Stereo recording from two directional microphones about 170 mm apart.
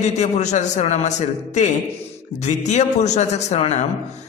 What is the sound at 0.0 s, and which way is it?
A man's voice, 45° left (ahead or behind).